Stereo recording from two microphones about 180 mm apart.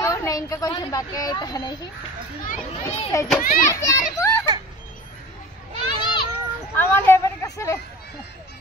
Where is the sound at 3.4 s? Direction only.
50° left (ahead or behind).